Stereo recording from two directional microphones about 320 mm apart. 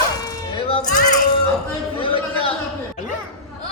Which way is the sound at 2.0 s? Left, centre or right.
Centre.